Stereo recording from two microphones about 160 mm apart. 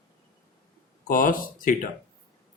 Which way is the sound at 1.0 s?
60° left (ahead or behind).